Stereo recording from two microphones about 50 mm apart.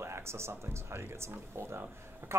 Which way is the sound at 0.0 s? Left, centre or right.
Right.